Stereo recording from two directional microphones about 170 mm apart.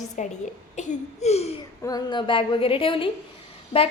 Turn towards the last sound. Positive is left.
turn(degrees=35)  # may be behind; listen again after turning